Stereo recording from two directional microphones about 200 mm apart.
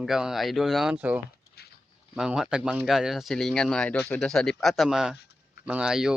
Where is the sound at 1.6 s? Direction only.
50° left (ahead or behind).